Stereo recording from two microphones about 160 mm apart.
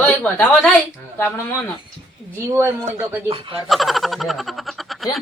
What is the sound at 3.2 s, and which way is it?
Speech, 35° right (ahead or behind).